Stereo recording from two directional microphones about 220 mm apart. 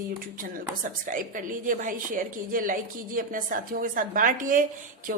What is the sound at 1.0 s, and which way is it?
Speech, 35° right (ahead or behind).